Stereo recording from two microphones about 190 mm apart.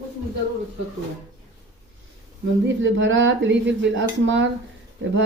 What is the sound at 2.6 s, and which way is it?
A woman's voice, 75° right (ahead or behind).